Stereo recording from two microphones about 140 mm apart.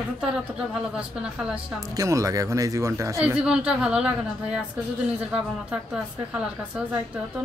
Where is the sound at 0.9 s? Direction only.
10° right (ahead or behind).